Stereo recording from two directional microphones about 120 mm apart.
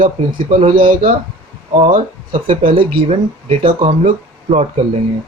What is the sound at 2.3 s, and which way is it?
Speech, 45° right (ahead or behind).